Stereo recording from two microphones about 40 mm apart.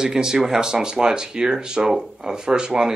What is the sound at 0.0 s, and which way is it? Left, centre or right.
Speech, centre.